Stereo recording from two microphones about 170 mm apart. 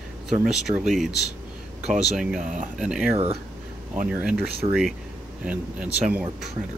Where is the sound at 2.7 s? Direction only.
5° right (ahead or behind).